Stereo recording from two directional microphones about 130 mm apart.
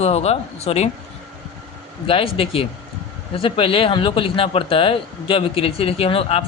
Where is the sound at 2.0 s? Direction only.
45° left (ahead or behind).